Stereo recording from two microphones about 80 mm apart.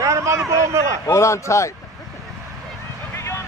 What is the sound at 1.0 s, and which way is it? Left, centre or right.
Speech, left.